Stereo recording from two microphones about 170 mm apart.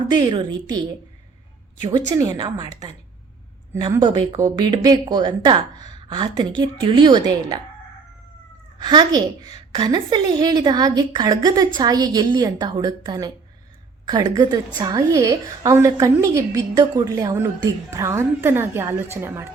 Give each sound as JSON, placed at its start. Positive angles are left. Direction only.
{"t": 0.2, "sound": "a woman's voice", "side_deg": -25}
{"t": 1.8, "sound": "a woman's voice", "side_deg": -25}
{"t": 4.4, "sound": "a woman's voice", "side_deg": -20}
{"t": 8.8, "sound": "a woman's voice", "side_deg": -25}